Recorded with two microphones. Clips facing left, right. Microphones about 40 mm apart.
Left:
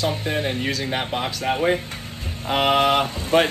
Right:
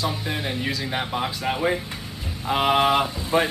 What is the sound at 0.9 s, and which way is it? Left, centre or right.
Speech, left.